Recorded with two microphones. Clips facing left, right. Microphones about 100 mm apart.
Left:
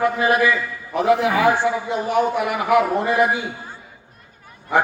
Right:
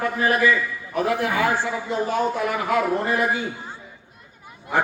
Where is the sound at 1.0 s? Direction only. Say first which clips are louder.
Left 7 dB; 90° left.